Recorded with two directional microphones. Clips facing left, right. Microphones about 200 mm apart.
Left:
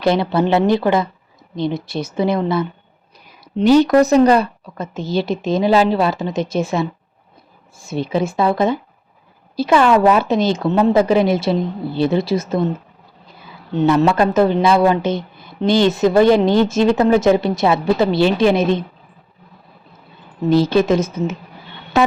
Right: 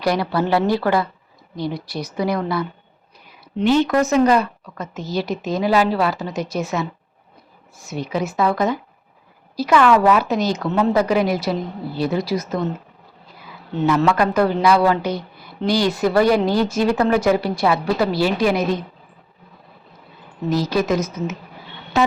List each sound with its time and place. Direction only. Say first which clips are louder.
0.0 s speech: left 4 dB; 25° left (ahead or behind)
3.4 s speech: left 5 dB; 40° left (ahead or behind)
13.7 s speech: left 3 dB; 25° left (ahead or behind)
20.5 s speech: left 5 dB; 25° left (ahead or behind)
22.0 s a sound: left 3 dB; 60° left (ahead or behind)